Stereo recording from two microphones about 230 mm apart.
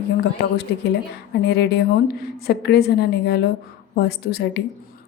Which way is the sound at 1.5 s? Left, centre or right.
Left.